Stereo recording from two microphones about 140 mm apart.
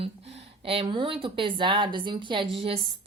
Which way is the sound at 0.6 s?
40° right (ahead or behind).